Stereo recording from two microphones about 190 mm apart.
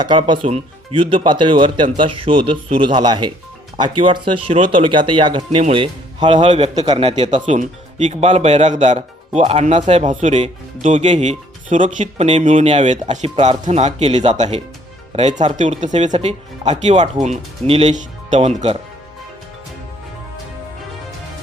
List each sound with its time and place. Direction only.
0.0 s speech: 25° right (ahead or behind)